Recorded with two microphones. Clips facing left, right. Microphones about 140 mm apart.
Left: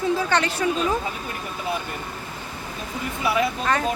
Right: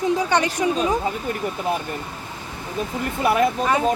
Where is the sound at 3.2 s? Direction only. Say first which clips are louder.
Right 4 dB; 50° right (ahead or behind).